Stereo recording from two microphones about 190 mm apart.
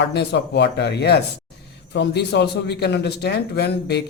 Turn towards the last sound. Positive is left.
turn(degrees=60)  # may be behind; listen again after turning